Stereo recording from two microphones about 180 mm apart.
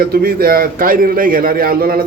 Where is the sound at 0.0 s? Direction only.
60° right (ahead or behind).